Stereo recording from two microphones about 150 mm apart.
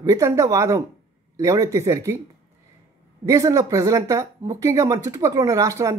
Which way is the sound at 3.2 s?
25° right (ahead or behind).